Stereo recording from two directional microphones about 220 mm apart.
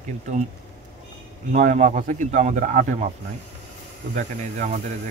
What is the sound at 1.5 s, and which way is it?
A man's voice, 35° right (ahead or behind).